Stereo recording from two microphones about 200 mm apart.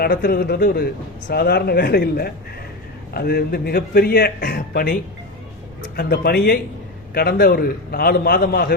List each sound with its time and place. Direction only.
0.0 s speech: 50° left (ahead or behind)
6.0 s speech: 50° left (ahead or behind)